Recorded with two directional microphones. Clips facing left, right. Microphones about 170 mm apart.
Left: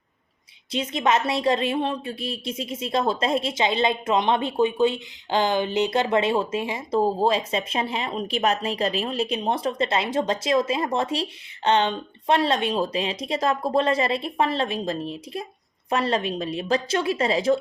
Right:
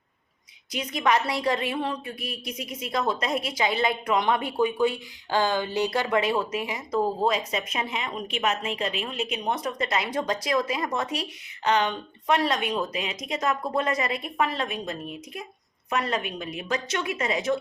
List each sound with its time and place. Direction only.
0.7 s a woman's voice: 25° left (ahead or behind)